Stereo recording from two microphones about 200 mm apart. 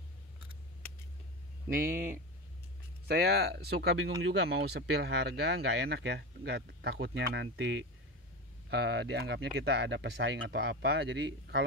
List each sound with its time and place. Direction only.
1.8 s speech: 45° right (ahead or behind); by 11.6 s 60° right (ahead or behind)